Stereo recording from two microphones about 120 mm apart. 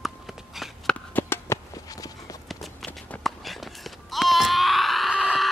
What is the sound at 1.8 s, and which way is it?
Run, 30° left (ahead or behind).